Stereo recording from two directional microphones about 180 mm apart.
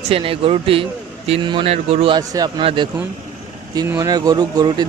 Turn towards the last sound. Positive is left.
turn(degrees=-25)  # may be behind; listen again after turning